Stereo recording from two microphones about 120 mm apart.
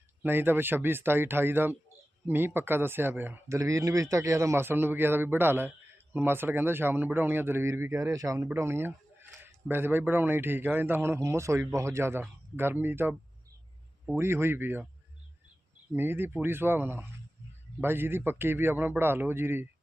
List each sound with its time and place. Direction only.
0.2 s speech: 20° right (ahead or behind)
14.2 s speech: 20° right (ahead or behind)
15.9 s speech: 20° right (ahead or behind)